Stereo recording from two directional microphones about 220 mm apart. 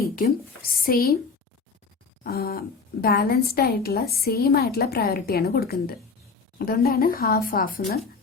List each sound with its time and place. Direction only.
0.0 s speech: 40° left (ahead or behind)
2.2 s a woman's voice: 45° left (ahead or behind)